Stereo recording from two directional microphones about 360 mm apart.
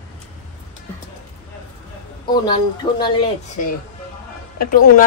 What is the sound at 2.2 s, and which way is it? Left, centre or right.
Speech, centre.